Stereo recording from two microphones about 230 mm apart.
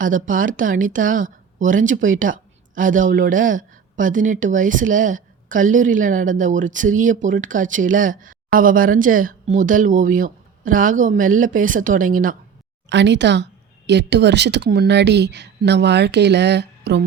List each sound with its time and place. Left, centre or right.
0.0 s speech: right
12.9 s speech: right